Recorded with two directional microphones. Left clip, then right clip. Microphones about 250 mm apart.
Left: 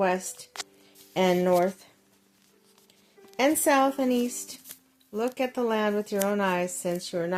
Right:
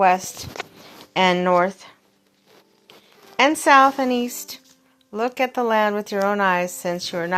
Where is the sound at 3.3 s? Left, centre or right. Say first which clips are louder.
Right 8 dB; centre.